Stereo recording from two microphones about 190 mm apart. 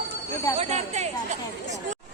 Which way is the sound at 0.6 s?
35° right (ahead or behind).